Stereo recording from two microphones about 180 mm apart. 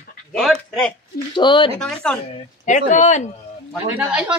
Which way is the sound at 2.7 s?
40° left (ahead or behind).